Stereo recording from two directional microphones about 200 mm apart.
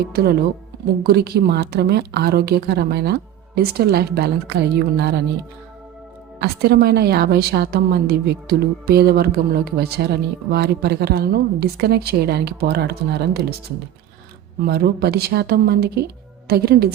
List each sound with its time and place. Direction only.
0.0 s a woman's voice: 50° right (ahead or behind)
6.4 s a woman's voice: 50° right (ahead or behind)
14.7 s a woman's voice: 50° right (ahead or behind)